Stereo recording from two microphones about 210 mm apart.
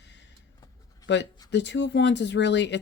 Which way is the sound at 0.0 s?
55° left (ahead or behind).